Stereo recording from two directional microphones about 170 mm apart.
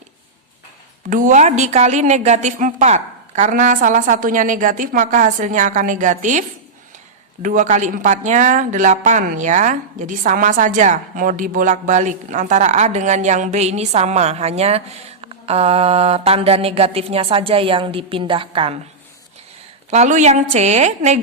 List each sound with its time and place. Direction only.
1.1 s speech: 50° right (ahead or behind)
7.4 s speech: 50° right (ahead or behind); by 18.8 s 30° right (ahead or behind)
19.9 s a woman's voice: 45° right (ahead or behind)